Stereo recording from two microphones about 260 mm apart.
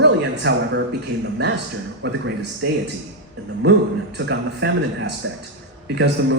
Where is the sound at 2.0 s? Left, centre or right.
Right.